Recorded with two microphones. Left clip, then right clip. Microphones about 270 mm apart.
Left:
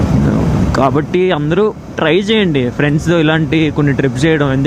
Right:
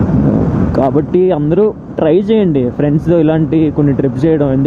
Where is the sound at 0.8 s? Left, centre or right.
Left.